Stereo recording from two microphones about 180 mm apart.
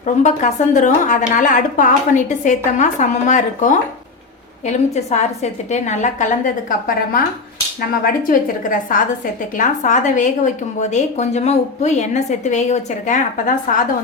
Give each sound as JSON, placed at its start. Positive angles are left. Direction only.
{"t": 0.0, "sound": "a woman's voice", "side_deg": 40}